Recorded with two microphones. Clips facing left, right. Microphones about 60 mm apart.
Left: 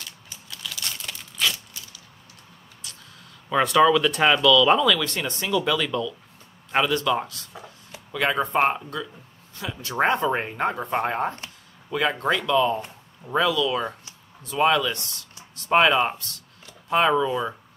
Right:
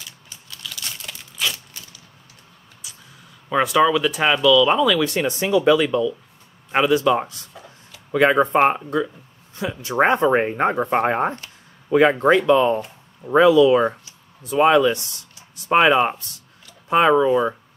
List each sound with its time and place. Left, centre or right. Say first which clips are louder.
0.5 s crumpling: even; centre
2.8 s a sound: even; centre
3.4 s speech: right 1 dB; centre; by 17.6 s right